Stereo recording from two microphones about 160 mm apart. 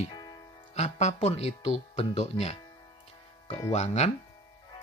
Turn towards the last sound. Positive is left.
turn(degrees=45)  # may be behind; listen again after turning